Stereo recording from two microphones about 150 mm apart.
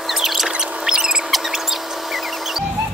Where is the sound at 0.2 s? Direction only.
Centre (ahead or behind).